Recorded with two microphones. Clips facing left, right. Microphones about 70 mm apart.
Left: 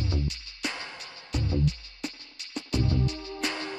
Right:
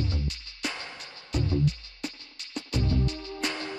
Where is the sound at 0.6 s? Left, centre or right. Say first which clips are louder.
Even; centre.